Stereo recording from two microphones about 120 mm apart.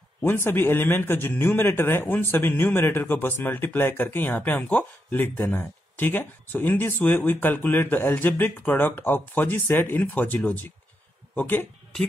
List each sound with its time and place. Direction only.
0.2 s a man's voice: 20° left (ahead or behind)